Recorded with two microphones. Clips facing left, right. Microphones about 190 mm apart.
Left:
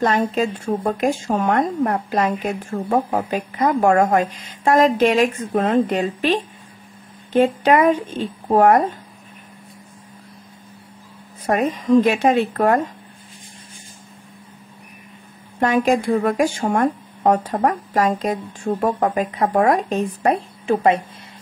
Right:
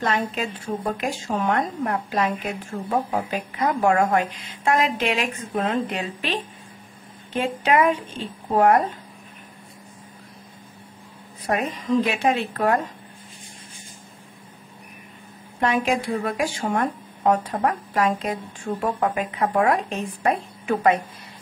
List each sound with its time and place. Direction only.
0.0 s a woman's voice: 40° left (ahead or behind)
11.4 s a woman's voice: 45° left (ahead or behind)
15.6 s speech: 45° left (ahead or behind)